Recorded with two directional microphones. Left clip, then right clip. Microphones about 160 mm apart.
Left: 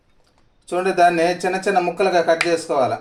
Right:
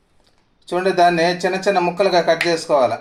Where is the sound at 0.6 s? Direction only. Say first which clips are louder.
Right 1 dB; 5° right (ahead or behind).